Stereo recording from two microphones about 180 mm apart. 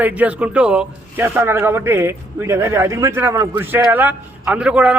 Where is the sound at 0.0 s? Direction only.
10° right (ahead or behind).